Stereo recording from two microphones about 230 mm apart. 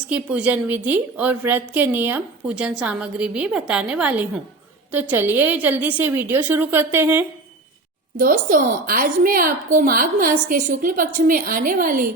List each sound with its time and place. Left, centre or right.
0.1 s a woman's voice: centre
8.2 s speech: right